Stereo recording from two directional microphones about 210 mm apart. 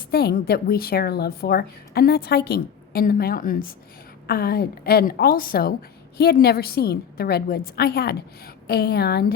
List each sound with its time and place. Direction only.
0.1 s speech: 50° left (ahead or behind)